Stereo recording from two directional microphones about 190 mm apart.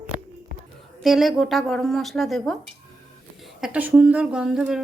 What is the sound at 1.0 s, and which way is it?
Speech, centre (ahead or behind).